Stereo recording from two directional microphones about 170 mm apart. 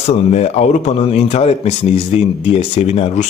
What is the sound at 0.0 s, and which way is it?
Speech, 40° left (ahead or behind).